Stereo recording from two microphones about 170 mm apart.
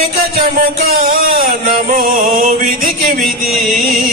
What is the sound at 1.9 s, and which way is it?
Music, 55° right (ahead or behind).